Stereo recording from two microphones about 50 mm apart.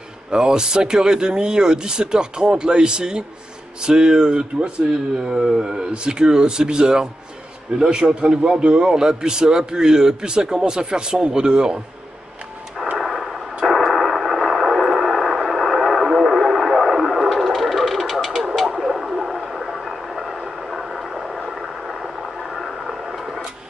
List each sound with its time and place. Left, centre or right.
0.3 s a man's voice: centre
12.9 s a sound: centre
13.7 s radio: centre